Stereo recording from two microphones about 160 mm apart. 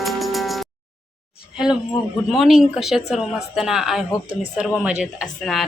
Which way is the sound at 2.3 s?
Centre (ahead or behind).